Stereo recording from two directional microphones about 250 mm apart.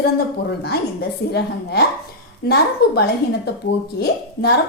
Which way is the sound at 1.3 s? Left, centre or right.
Left.